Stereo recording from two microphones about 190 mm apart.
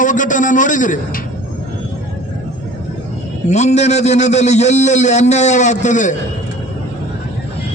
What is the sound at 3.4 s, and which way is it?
A man's voice, 35° left (ahead or behind).